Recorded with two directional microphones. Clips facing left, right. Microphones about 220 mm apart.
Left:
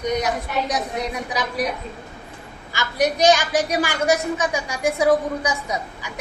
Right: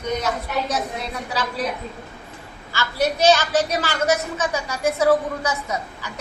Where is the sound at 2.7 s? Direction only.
15° left (ahead or behind).